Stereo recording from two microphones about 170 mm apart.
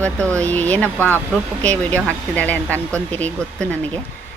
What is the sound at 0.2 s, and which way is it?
Speech, 15° right (ahead or behind).